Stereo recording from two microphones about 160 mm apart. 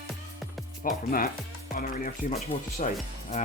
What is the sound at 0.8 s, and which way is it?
Speech, 60° left (ahead or behind).